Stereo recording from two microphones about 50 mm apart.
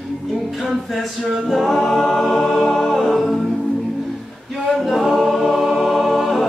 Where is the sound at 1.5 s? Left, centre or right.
Centre.